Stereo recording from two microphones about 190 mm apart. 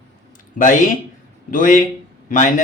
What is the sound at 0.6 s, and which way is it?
Speech, 45° left (ahead or behind).